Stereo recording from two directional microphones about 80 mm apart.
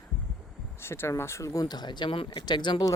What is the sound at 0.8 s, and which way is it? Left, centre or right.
Speech, left.